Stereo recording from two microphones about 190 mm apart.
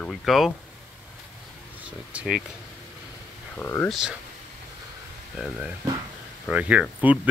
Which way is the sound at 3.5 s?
10° left (ahead or behind).